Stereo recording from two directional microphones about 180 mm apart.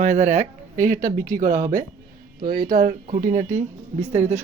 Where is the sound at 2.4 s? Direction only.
55° right (ahead or behind); by 4.4 s 40° right (ahead or behind).